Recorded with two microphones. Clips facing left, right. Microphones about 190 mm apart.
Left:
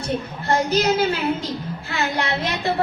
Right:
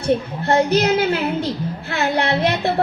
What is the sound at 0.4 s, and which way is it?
Speech, 60° right (ahead or behind).